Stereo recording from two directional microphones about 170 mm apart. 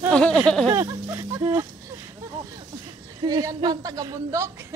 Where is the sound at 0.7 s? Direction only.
20° right (ahead or behind).